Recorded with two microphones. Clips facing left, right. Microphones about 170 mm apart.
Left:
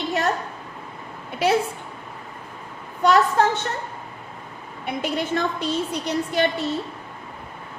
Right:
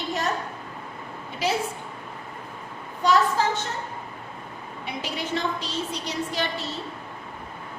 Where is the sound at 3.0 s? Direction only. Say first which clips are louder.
Left 4 dB; 60° left (ahead or behind).